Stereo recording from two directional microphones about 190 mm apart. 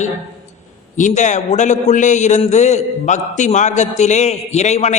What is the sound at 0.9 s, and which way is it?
A man's voice, 40° left (ahead or behind).